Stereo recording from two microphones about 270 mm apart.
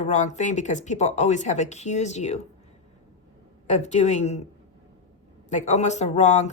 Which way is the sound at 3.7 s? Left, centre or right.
Left.